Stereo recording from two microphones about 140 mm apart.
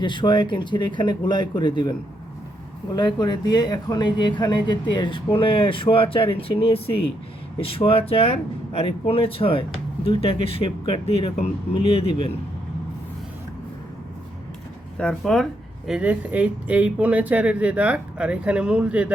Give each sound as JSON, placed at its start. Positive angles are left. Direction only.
{"t": 0.0, "sound": "speech", "side_deg": 35}
{"t": 14.9, "sound": "speech", "side_deg": 5}
{"t": 15.9, "sound": "speech", "side_deg": -10}